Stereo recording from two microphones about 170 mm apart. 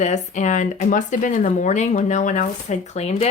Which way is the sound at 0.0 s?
45° left (ahead or behind).